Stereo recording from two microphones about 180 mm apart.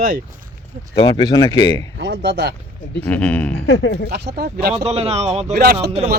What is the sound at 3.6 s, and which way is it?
Speech, 75° left (ahead or behind).